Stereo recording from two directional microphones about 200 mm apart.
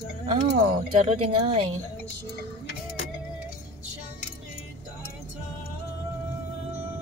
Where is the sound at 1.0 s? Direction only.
30° right (ahead or behind).